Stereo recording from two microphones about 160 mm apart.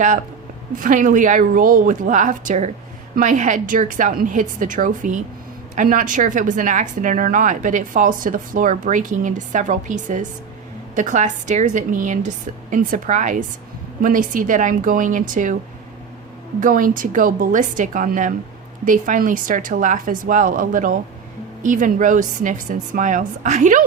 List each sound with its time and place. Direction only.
0.8 s a woman's voice: 55° right (ahead or behind)
16.6 s a woman's voice: 55° right (ahead or behind)